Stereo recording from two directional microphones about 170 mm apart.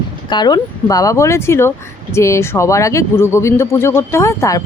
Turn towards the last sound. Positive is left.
turn(degrees=20)  # may be behind; listen again after turning